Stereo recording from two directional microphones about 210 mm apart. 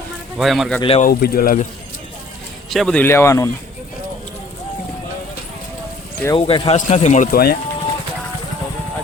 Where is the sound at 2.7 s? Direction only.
5° left (ahead or behind).